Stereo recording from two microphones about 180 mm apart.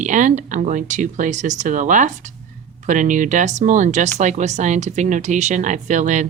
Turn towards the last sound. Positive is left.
turn(degrees=-40)  # may be behind; listen again after turning